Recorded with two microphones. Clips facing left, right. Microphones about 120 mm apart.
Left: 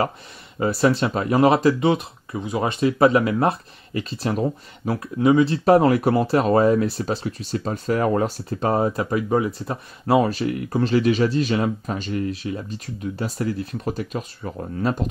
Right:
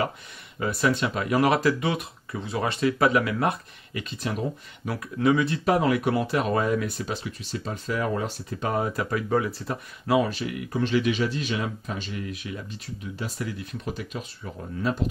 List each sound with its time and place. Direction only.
0.6 s speech: 35° left (ahead or behind)
4.8 s speech: 25° left (ahead or behind); by 8.3 s 50° left (ahead or behind)
8.5 s speech: 35° left (ahead or behind)
9.7 s speech: 35° left (ahead or behind)